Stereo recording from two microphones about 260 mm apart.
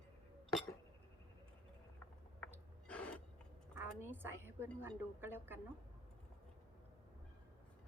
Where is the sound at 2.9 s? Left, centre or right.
Centre.